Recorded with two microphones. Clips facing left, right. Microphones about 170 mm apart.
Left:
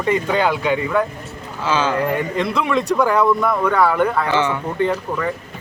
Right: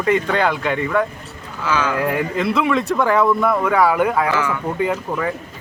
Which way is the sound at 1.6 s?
25° left (ahead or behind).